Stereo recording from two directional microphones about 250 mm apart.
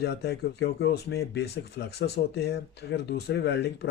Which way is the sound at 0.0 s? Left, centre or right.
Left.